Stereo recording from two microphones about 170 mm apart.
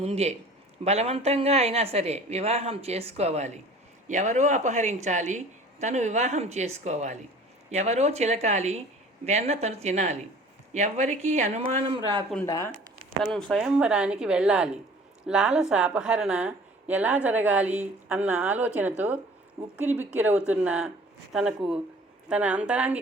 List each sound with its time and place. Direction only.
0.0 s a man's voice: 40° right (ahead or behind)
12.5 s speech: 20° left (ahead or behind)
13.3 s a woman's voice: centre (ahead or behind)